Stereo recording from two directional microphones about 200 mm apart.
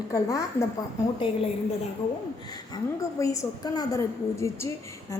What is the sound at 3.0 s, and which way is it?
A woman's voice, 15° left (ahead or behind).